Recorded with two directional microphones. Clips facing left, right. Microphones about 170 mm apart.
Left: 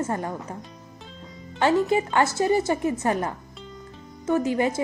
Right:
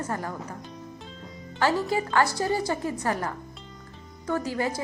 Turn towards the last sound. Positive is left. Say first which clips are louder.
# left 5 dB
turn(degrees=20)  # may be behind; listen again after turning